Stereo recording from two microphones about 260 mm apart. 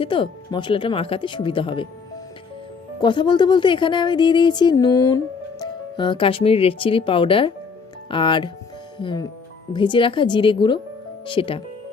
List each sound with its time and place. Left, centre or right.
0.0 s speech: centre
3.0 s a woman's voice: centre